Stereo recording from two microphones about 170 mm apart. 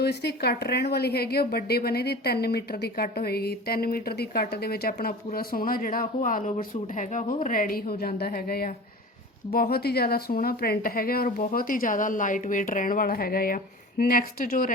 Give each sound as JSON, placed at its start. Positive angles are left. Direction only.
{"t": 0.0, "sound": "a woman's voice", "side_deg": 80}